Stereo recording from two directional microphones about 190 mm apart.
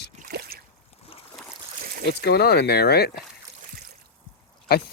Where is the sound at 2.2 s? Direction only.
55° left (ahead or behind).